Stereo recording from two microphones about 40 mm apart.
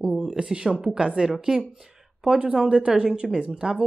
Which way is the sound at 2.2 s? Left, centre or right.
Right.